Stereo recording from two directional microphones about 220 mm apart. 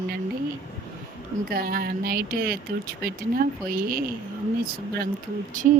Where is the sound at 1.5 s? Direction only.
40° right (ahead or behind).